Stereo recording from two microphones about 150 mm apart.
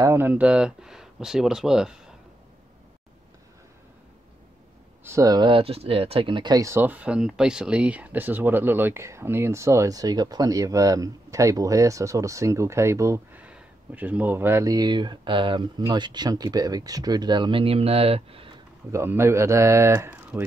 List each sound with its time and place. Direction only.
0.0 s speech: 15° right (ahead or behind)
5.0 s speech: 20° right (ahead or behind); by 18.5 s 40° right (ahead or behind)
18.9 s speech: 20° right (ahead or behind)